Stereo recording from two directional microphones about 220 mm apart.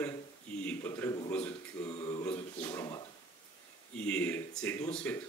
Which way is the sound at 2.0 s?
20° left (ahead or behind).